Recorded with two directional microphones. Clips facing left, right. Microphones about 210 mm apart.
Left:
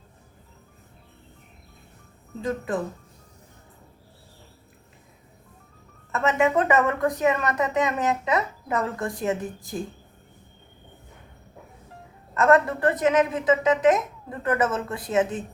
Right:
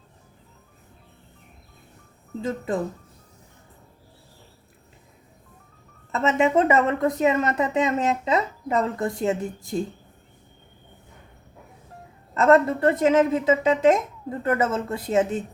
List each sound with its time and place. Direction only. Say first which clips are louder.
2.4 s a woman's voice: right 1 dB; 25° right (ahead or behind)
6.1 s a woman's voice: right 1 dB; 25° right (ahead or behind)
12.3 s a woman's voice: right 2 dB; 25° right (ahead or behind)